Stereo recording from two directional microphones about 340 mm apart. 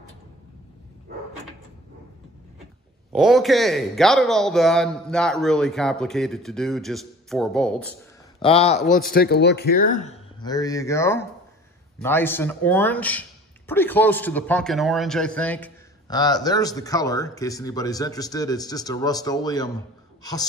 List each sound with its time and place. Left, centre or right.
3.1 s a man's voice: centre
8.4 s a man's voice: centre